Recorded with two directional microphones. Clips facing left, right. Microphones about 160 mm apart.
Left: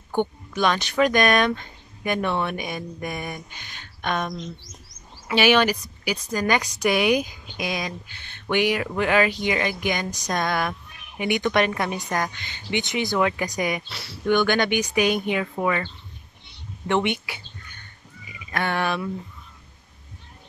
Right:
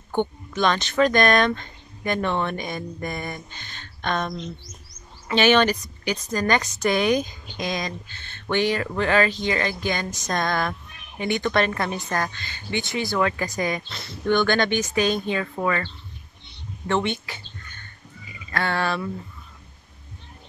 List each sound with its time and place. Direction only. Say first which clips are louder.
0.1 s speech: even; 10° left (ahead or behind)
5.3 s speech: right 1 dB; 10° left (ahead or behind)
18.5 s speech: even; 15° left (ahead or behind)